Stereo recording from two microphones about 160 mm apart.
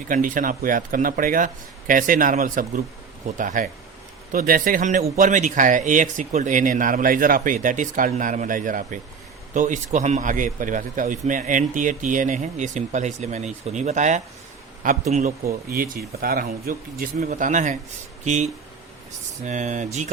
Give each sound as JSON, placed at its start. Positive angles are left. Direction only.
{"t": 0.1, "sound": "a man's voice", "side_deg": -55}
{"t": 15.4, "sound": "speech", "side_deg": -65}
{"t": 17.2, "sound": "speech", "side_deg": -50}